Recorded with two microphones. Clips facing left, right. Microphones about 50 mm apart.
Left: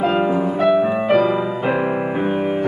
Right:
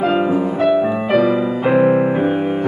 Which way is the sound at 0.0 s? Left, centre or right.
Centre.